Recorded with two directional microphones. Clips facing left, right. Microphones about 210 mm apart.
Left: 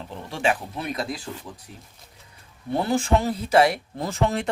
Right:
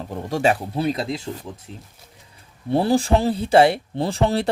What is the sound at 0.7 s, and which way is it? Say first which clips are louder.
Speech: right 6 dB; 30° right (ahead or behind).